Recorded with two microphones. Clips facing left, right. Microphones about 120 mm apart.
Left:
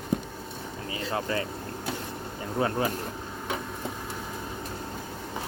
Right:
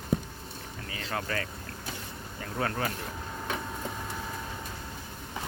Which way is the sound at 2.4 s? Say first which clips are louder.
Left 4 dB; 25° left (ahead or behind).